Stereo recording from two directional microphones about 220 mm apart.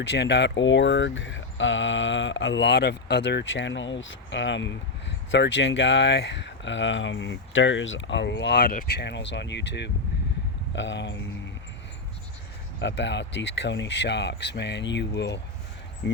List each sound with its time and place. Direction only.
0.1 s speech: 50° left (ahead or behind)
12.8 s speech: 55° left (ahead or behind)